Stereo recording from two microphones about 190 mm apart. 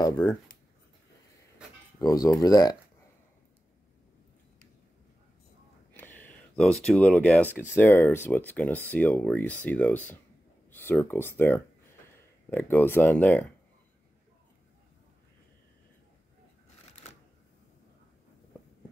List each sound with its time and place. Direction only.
0.0 s speech: 15° left (ahead or behind)
2.0 s speech: 20° left (ahead or behind)
5.9 s a sound: 10° left (ahead or behind)
7.5 s speech: 10° left (ahead or behind)